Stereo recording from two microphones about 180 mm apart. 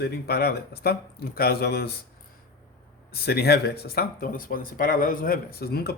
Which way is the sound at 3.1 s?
60° left (ahead or behind).